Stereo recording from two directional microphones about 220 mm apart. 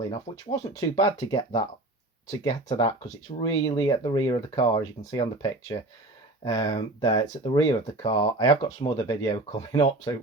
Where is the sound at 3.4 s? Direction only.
15° left (ahead or behind).